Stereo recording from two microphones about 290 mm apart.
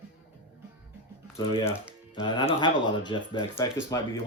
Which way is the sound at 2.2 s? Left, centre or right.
Centre.